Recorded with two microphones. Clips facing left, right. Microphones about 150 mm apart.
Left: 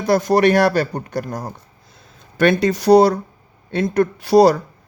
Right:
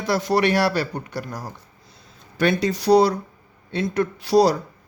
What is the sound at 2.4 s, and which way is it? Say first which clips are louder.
Speech: left 5 dB; 55° left (ahead or behind).